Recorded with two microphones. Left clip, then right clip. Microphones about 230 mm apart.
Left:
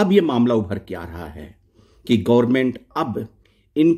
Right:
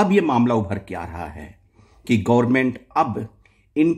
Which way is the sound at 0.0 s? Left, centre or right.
Centre.